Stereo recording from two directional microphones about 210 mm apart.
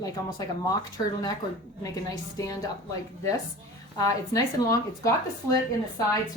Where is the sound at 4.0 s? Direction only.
15° left (ahead or behind).